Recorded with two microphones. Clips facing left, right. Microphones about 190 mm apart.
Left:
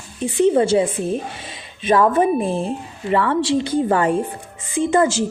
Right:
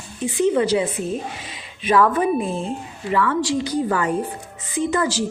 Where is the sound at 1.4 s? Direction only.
25° left (ahead or behind).